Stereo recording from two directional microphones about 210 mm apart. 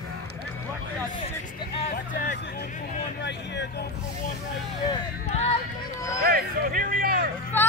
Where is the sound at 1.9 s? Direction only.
50° left (ahead or behind).